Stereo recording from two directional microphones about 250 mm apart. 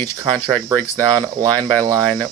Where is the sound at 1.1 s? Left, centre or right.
Centre.